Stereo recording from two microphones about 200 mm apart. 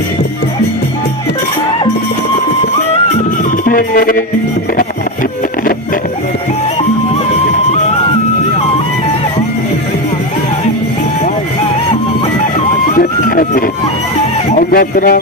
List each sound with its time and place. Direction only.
3.7 s speech: 45° left (ahead or behind)
12.9 s music: 45° left (ahead or behind)
14.5 s speech: 45° left (ahead or behind)